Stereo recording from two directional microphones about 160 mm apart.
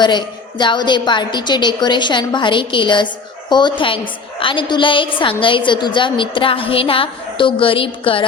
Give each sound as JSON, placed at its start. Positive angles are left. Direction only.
{"t": 0.0, "sound": "a woman's voice", "side_deg": 30}